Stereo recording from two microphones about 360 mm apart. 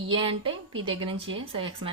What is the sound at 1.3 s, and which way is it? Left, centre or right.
Speech, centre.